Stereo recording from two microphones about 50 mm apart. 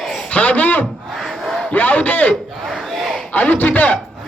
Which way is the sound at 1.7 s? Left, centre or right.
Left.